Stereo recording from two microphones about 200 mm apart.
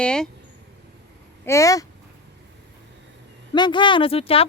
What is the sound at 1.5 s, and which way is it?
Speech, 15° left (ahead or behind).